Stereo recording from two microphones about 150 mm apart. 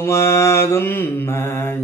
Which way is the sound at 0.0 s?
15° left (ahead or behind).